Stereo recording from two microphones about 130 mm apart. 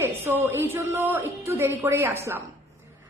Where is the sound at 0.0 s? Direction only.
20° right (ahead or behind).